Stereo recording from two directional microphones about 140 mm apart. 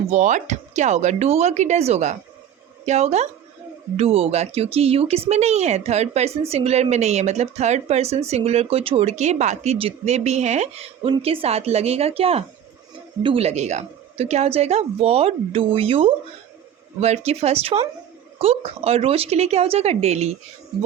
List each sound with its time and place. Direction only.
0.1 s a woman's voice: 60° right (ahead or behind)